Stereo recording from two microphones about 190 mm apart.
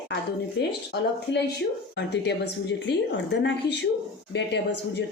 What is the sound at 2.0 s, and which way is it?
A woman's voice, 65° left (ahead or behind).